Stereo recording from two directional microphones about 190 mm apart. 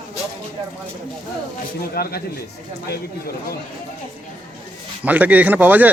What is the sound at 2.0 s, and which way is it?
Speech, 55° left (ahead or behind).